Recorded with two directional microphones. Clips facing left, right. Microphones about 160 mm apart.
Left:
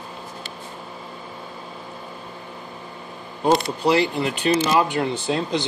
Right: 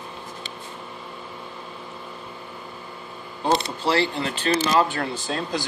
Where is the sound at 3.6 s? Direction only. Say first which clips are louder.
Left 3 dB; 15° left (ahead or behind).